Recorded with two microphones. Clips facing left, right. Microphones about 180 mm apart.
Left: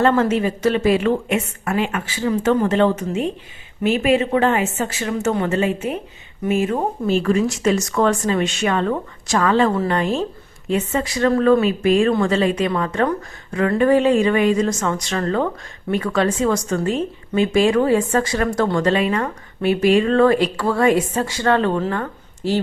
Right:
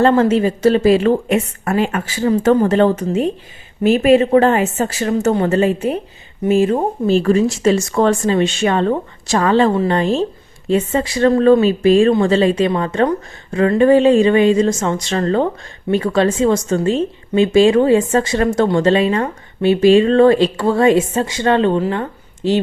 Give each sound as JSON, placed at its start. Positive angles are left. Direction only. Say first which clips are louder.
{"t": 0.0, "sound": "a woman's voice", "louder": "right 4 dB", "side_deg": -30}